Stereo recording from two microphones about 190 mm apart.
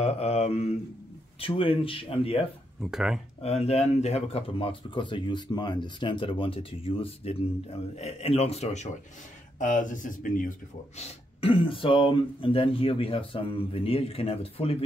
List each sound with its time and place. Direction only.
0.0 s a man's voice: 35° left (ahead or behind)
2.8 s speech: 5° right (ahead or behind)
3.4 s a man's voice: 35° left (ahead or behind)
11.0 s speech: 30° left (ahead or behind)